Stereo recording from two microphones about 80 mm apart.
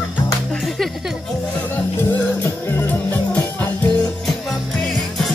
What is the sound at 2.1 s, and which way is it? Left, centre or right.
Music, left.